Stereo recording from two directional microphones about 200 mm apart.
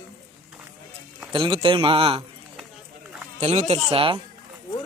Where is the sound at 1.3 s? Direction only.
25° right (ahead or behind).